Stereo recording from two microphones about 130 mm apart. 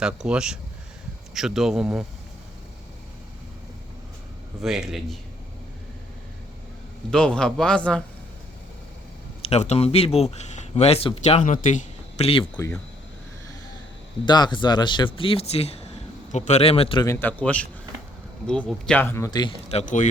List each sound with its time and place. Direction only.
0.0 s speech: 5° right (ahead or behind)
4.6 s speech: centre (ahead or behind)
7.1 s a man's voice: 5° left (ahead or behind)
9.4 s speech: 55° left (ahead or behind)
14.3 s a man's voice: 35° left (ahead or behind)
17.2 s a man's voice: 15° left (ahead or behind)
19.3 s a man's voice: 35° left (ahead or behind)
19.7 s speech: 75° left (ahead or behind)